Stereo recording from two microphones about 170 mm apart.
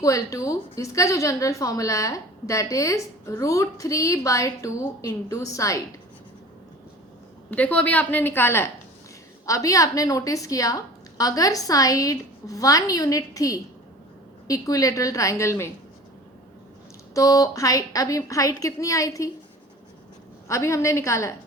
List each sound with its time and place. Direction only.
0.0 s a woman's voice: 20° left (ahead or behind)
7.5 s a woman's voice: 10° left (ahead or behind)
17.2 s a woman's voice: 20° left (ahead or behind)
20.5 s a woman's voice: 15° left (ahead or behind)